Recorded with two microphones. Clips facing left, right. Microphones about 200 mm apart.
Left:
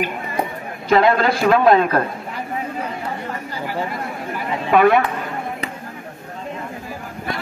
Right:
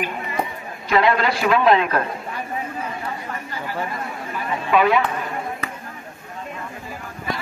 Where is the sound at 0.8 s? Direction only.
45° left (ahead or behind).